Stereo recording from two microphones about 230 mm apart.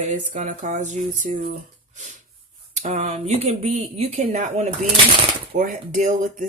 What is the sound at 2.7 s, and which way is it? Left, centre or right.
Speech, right.